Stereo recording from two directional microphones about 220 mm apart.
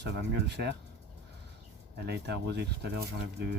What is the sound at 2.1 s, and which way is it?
Speech, 50° right (ahead or behind).